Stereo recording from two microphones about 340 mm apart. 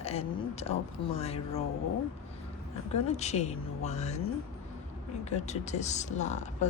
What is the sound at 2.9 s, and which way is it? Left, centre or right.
Speech, centre.